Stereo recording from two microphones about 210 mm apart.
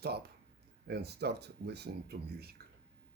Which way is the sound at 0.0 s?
50° right (ahead or behind).